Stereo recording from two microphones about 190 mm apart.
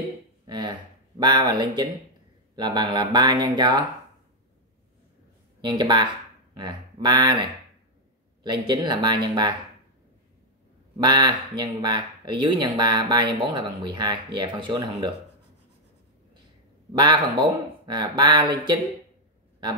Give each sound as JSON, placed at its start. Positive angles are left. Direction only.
{"t": 0.5, "sound": "speech", "side_deg": -25}
{"t": 5.6, "sound": "speech", "side_deg": -25}
{"t": 8.5, "sound": "speech", "side_deg": -20}
{"t": 11.0, "sound": "speech", "side_deg": -20}
{"t": 16.9, "sound": "speech", "side_deg": -25}